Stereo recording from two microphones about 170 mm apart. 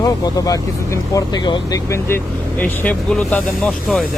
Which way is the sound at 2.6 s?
10° left (ahead or behind).